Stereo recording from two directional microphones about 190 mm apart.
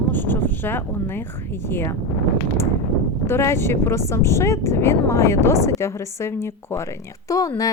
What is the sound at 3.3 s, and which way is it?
A woman's voice, 15° left (ahead or behind).